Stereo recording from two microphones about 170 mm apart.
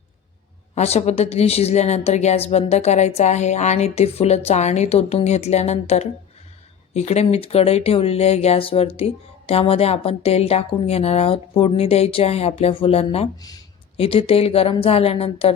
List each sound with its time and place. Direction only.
0.8 s speech: 40° left (ahead or behind)